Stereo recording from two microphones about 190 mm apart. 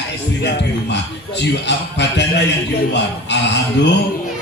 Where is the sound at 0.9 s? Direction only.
65° left (ahead or behind).